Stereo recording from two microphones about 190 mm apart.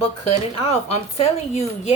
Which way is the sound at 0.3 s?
35° left (ahead or behind).